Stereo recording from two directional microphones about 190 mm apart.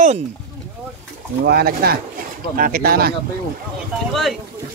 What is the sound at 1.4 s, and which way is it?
Speech, 55° right (ahead or behind).